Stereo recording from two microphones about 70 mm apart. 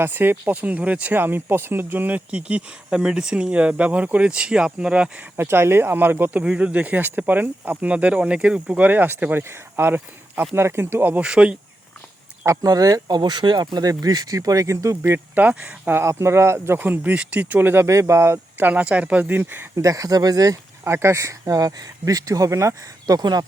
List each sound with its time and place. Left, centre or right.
0.0 s speech: right; by 5.2 s centre
5.4 s speech: right
6.4 s speech: centre
8.8 s speech: right
11.2 s speech: centre
12.6 s speech: right
15.0 s speech: right
15.4 s speech: right
16.0 s speech: right
17.8 s speech: right
18.6 s speech: centre
19.7 s speech: right
20.8 s speech: right
23.0 s speech: right